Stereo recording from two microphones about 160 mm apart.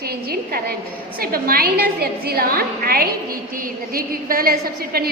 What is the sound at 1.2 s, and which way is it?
A woman's voice, 65° right (ahead or behind).